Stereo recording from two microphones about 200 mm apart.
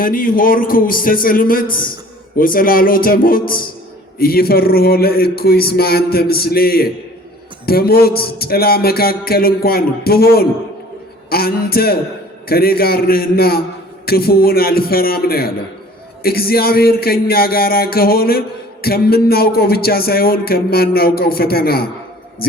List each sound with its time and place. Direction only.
0.0 s a man's voice: 45° left (ahead or behind)